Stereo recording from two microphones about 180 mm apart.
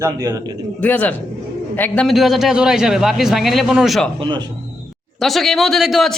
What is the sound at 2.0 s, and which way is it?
A man's voice, centre (ahead or behind).